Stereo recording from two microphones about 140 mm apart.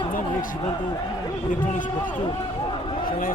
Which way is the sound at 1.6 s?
65° left (ahead or behind).